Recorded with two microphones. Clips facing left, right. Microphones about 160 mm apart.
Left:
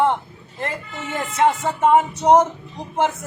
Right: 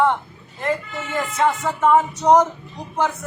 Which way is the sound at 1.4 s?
25° left (ahead or behind).